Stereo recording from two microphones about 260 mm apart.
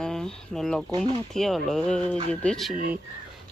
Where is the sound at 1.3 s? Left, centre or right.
Centre.